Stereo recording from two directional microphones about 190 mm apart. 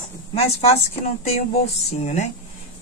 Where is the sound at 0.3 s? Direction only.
30° left (ahead or behind).